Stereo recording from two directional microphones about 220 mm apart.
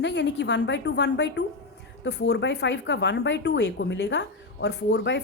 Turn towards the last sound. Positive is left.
turn(degrees=50)  # may be behind; listen again after turning